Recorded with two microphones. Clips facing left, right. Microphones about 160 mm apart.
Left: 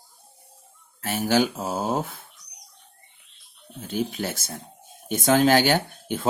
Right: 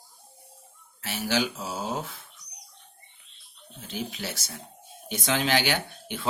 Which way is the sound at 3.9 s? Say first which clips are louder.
Left 7 dB; 50° left (ahead or behind).